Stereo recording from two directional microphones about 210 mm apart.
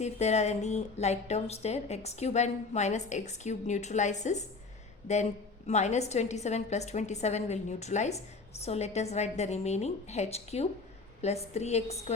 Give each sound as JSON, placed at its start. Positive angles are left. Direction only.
{"t": 0.0, "sound": "a woman's voice", "side_deg": 30}